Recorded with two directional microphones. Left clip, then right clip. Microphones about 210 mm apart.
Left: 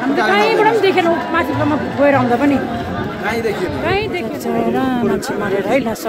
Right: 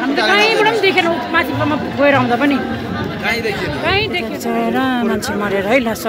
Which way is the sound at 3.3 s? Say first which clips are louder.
Right 1 dB; 30° left (ahead or behind).